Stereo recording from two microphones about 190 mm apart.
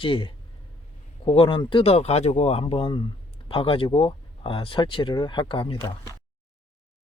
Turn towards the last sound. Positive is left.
turn(degrees=25)  # may be behind; listen again after turning